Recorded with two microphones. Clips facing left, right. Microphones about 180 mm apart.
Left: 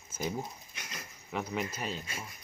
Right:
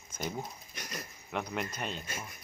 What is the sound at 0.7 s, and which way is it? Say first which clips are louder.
Dog: right 4 dB; 40° right (ahead or behind).